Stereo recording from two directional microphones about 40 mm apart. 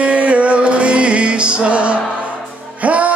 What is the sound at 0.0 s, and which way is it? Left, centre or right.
Music, right.